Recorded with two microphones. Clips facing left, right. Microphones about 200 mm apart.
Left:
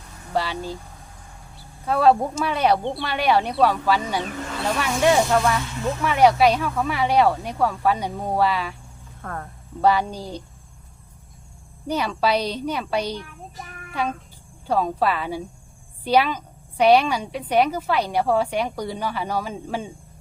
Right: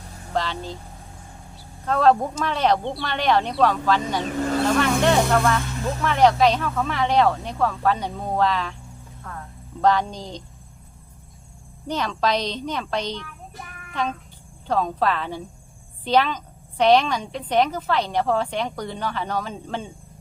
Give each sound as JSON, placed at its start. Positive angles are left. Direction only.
{"t": 0.3, "sound": "a woman's voice", "side_deg": 10}
{"t": 1.8, "sound": "a woman's voice", "side_deg": 10}
{"t": 9.2, "sound": "speech", "side_deg": 60}
{"t": 9.8, "sound": "a woman's voice", "side_deg": 10}
{"t": 11.9, "sound": "a woman's voice", "side_deg": 10}